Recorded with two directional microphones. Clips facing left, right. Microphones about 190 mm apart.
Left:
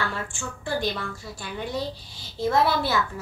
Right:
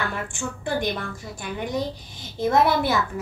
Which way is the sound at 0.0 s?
20° right (ahead or behind).